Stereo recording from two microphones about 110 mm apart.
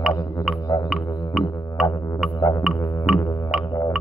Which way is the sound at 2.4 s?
30° left (ahead or behind).